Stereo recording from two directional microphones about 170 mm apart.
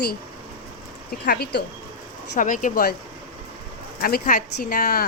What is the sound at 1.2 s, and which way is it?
Speech, 70° left (ahead or behind).